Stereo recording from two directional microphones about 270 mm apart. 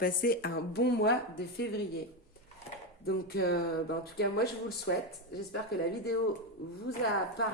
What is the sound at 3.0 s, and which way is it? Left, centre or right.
Speech, left.